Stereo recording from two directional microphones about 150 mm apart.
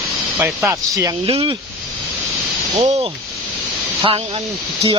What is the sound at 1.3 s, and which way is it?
Speech, 40° right (ahead or behind).